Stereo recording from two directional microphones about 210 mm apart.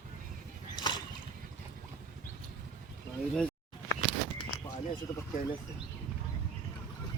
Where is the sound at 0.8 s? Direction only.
20° left (ahead or behind).